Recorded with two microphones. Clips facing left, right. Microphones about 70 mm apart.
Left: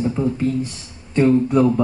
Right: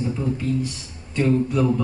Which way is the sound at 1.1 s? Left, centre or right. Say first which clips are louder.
Left 5 dB; left.